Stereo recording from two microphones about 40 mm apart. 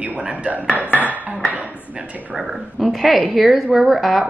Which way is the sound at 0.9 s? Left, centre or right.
Right.